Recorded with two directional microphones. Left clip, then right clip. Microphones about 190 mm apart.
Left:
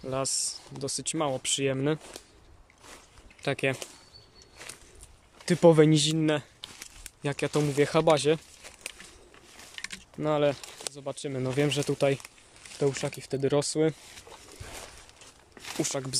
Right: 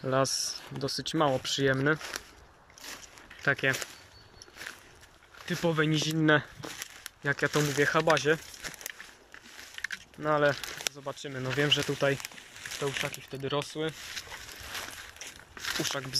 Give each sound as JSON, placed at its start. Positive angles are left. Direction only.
{"t": 0.0, "sound": "speech", "side_deg": 5}
{"t": 3.4, "sound": "speech", "side_deg": 20}
{"t": 5.4, "sound": "speech", "side_deg": 35}
{"t": 6.1, "sound": "speech", "side_deg": 5}
{"t": 9.8, "sound": "a sound", "side_deg": 35}
{"t": 10.2, "sound": "speech", "side_deg": 20}
{"t": 12.8, "sound": "speech", "side_deg": 25}
{"t": 15.5, "sound": "a sound", "side_deg": 20}